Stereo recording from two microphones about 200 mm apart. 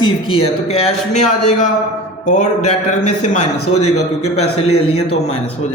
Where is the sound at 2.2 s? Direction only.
35° left (ahead or behind).